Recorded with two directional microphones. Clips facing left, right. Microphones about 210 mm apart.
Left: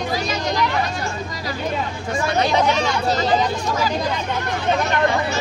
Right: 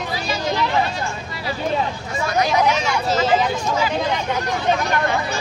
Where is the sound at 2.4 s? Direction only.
30° left (ahead or behind).